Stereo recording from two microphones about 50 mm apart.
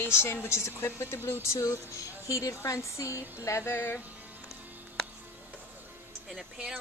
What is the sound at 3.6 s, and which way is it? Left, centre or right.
Music, left.